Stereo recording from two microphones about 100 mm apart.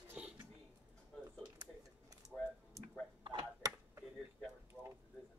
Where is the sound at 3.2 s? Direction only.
55° right (ahead or behind).